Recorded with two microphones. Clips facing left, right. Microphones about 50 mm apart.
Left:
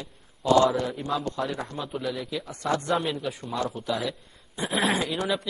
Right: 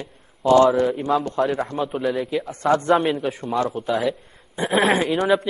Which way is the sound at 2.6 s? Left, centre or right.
Right.